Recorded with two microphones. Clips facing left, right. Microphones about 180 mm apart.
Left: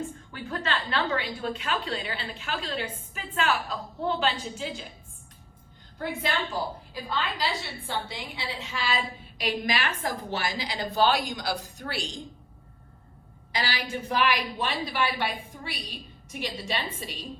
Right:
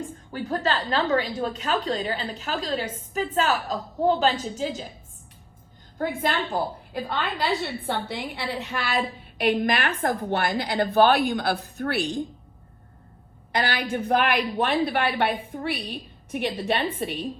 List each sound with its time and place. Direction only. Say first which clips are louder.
0.3 s a woman's voice: right 6 dB; 40° right (ahead or behind)
6.0 s a woman's voice: right 4 dB; 50° right (ahead or behind)
13.5 s a woman's voice: right 6 dB; 55° right (ahead or behind)